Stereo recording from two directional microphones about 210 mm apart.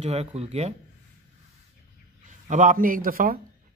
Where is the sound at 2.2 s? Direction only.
35° right (ahead or behind).